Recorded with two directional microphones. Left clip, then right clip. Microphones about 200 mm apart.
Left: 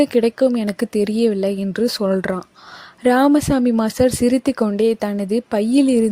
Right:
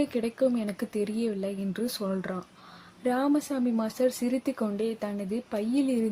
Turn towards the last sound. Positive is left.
turn(degrees=45)  # may be behind; listen again after turning